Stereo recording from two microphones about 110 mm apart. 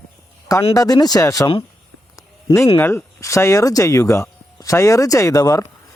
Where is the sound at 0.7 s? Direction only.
35° left (ahead or behind).